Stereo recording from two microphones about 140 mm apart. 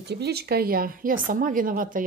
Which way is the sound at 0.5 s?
90° right.